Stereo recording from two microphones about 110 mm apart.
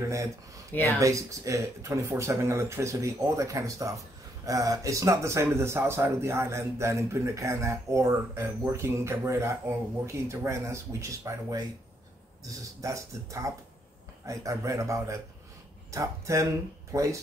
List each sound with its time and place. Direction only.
0.9 s speech: 30° right (ahead or behind)